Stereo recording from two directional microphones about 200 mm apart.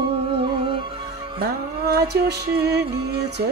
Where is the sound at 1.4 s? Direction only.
55° right (ahead or behind).